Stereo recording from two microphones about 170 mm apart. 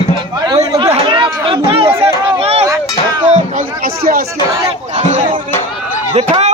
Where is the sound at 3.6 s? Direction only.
60° right (ahead or behind).